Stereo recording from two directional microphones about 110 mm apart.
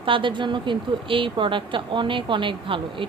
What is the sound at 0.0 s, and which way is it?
A woman's voice, 50° right (ahead or behind).